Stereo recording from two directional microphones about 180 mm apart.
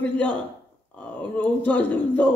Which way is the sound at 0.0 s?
10° left (ahead or behind).